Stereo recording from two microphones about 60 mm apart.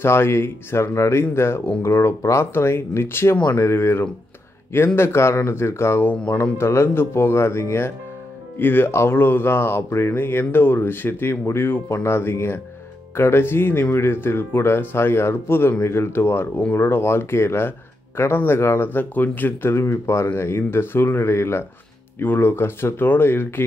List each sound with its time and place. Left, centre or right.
0.0 s speech: left
19.7 s speech: left